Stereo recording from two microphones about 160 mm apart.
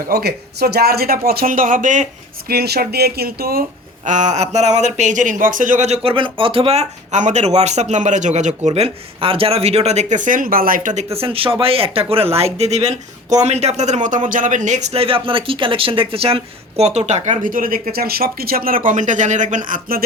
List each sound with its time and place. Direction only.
0.1 s speech: 80° right; by 2.0 s 50° right (ahead or behind)
2.5 s speech: 80° right
4.0 s speech: 50° right (ahead or behind)
11.1 s speech: 35° right (ahead or behind); by 20.1 s 60° right (ahead or behind)